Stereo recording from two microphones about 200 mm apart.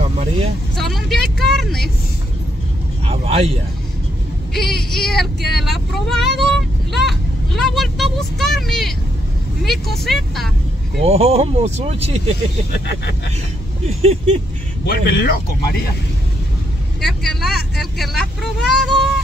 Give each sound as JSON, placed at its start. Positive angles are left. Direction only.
{"t": 0.0, "sound": "vehicle", "side_deg": -30}
{"t": 0.7, "sound": "speech", "side_deg": 0}
{"t": 3.1, "sound": "speech", "side_deg": -30}
{"t": 4.6, "sound": "speech", "side_deg": 0}
{"t": 10.0, "sound": "speech", "side_deg": 0}
{"t": 11.1, "sound": "speech", "side_deg": -30}
{"t": 13.8, "sound": "speech", "side_deg": -30}
{"t": 14.9, "sound": "speech", "side_deg": 50}
{"t": 17.0, "sound": "speech", "side_deg": 0}